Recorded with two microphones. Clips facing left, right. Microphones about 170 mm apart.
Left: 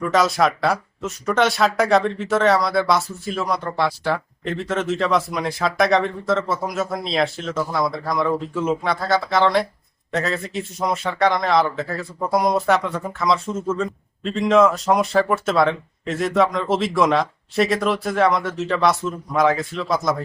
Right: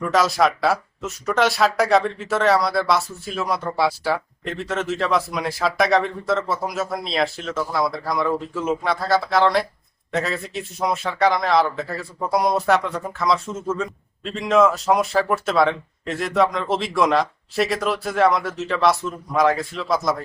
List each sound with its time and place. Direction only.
0.0 s a man's voice: centre (ahead or behind)